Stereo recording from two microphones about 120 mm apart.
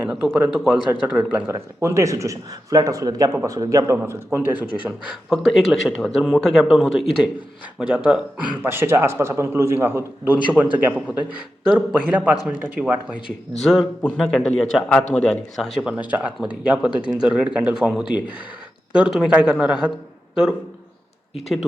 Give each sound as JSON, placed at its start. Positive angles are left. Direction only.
{"t": 0.0, "sound": "speech", "side_deg": -5}
{"t": 5.0, "sound": "a man's voice", "side_deg": 0}
{"t": 13.6, "sound": "a man's voice", "side_deg": 5}